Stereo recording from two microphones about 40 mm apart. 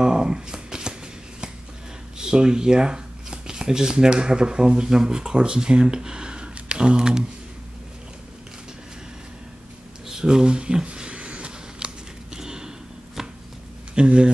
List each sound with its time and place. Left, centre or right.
0.0 s shuffling cards: centre
2.1 s speech: centre
10.0 s a sound: centre
13.9 s speech: right